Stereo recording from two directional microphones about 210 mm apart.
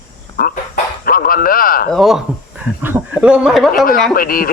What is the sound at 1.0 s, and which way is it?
Speech, 45° left (ahead or behind).